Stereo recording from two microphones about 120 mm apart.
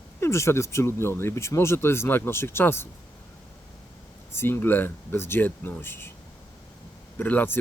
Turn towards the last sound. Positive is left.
turn(degrees=15)  # may be behind; listen again after turning